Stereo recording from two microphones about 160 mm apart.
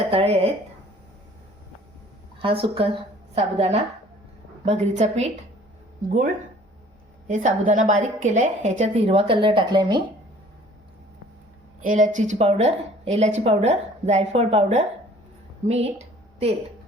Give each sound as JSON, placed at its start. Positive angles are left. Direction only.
{"t": 0.1, "sound": "speech", "side_deg": -35}
{"t": 2.4, "sound": "a woman's voice", "side_deg": -35}
{"t": 7.3, "sound": "a woman's voice", "side_deg": -55}
{"t": 11.8, "sound": "a woman's voice", "side_deg": -55}